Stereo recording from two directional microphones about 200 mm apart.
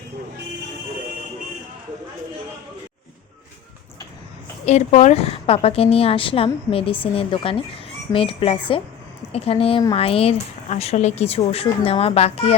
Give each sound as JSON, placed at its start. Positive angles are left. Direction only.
{"t": 4.6, "sound": "a woman's voice", "side_deg": 35}